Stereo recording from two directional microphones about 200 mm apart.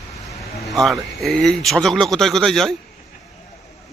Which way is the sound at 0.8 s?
Centre (ahead or behind).